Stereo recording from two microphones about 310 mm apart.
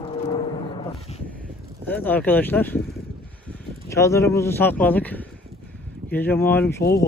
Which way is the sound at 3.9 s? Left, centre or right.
Centre.